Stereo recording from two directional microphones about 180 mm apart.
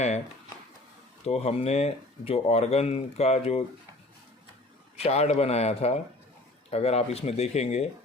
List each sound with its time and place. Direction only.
1.2 s speech: 35° left (ahead or behind)
4.9 s speech: 35° left (ahead or behind)